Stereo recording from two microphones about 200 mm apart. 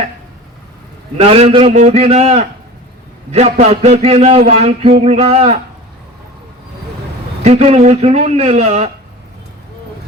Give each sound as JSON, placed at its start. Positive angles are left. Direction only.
{"t": 1.2, "sound": "speech", "side_deg": -30}
{"t": 7.4, "sound": "speech", "side_deg": -30}